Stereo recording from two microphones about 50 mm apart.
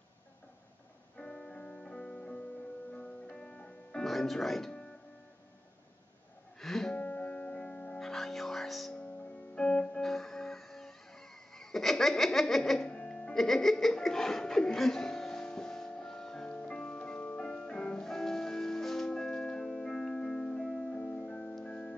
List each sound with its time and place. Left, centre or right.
1.1 s music: centre
4.0 s speech: centre
6.6 s music: centre
7.0 s music: left
8.0 s music: centre
8.9 s music: left; by 12.8 s centre
12.8 s music: centre